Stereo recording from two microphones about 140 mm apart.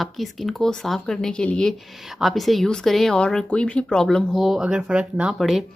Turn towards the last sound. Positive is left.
turn(degrees=0)  # may be behind; listen again after turning